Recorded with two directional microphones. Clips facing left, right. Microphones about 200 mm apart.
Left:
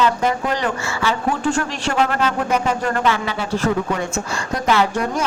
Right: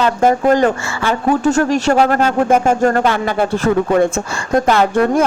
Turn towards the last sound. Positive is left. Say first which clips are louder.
# right 7 dB
turn(degrees=-55)  # may be behind; listen again after turning